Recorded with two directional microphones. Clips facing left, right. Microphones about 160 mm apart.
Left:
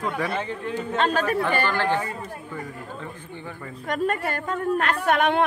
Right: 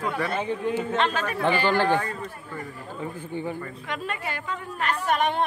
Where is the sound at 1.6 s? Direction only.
15° right (ahead or behind).